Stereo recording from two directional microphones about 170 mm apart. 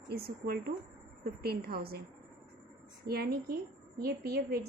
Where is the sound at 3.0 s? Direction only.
70° right (ahead or behind).